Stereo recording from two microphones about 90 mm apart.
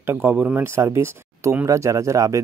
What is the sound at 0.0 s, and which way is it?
Speech, 25° right (ahead or behind).